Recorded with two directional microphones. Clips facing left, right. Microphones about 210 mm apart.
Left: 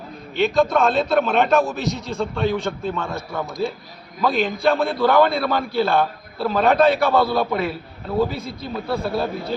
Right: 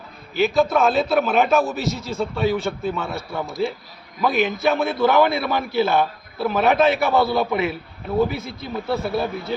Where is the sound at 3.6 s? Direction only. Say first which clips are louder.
Right 1 dB; 15° right (ahead or behind).